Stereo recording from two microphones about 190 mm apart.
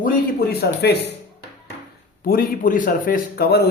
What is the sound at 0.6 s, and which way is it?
Speech, 60° left (ahead or behind).